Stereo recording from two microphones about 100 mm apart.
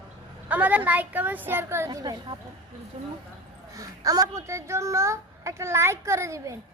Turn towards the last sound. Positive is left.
turn(degrees=-30)  # may be behind; listen again after turning